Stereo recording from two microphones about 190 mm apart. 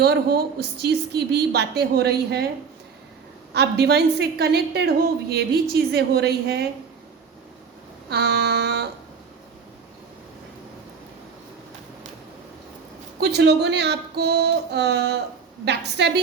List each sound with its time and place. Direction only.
0.0 s a woman's voice: 55° right (ahead or behind)
3.5 s a woman's voice: 60° right (ahead or behind)
8.1 s a sound: 60° right (ahead or behind)
13.1 s a woman's voice: 60° right (ahead or behind)